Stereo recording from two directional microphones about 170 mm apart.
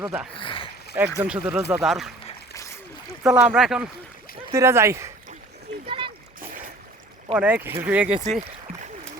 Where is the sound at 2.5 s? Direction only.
15° left (ahead or behind).